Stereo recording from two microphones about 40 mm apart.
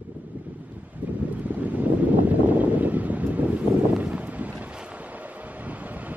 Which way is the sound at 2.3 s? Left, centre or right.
Right.